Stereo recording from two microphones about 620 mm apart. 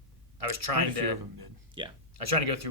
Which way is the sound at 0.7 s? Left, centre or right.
Right.